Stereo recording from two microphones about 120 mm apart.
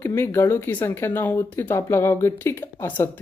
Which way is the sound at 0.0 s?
20° left (ahead or behind).